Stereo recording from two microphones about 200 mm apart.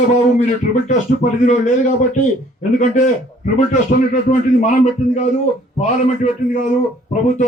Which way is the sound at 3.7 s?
40° left (ahead or behind).